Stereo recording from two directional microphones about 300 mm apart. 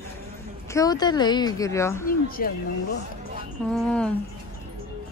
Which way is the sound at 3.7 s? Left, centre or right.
Centre.